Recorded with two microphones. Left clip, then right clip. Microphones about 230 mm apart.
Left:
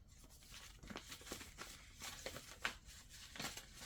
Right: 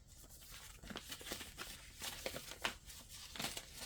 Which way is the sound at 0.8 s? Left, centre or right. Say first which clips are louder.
Right 4 dB; right.